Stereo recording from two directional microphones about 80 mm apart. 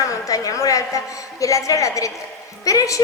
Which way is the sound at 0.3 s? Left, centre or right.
Left.